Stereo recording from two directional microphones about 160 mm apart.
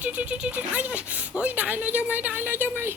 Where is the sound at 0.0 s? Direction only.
10° right (ahead or behind).